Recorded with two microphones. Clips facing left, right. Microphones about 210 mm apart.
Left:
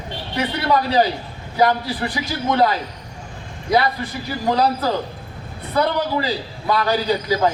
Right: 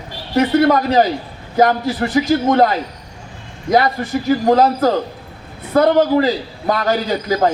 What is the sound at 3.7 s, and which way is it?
A man's voice, 45° right (ahead or behind).